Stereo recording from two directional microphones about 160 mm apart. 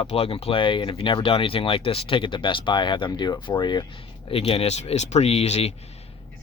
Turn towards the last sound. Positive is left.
turn(degrees=40)  # may be behind; listen again after turning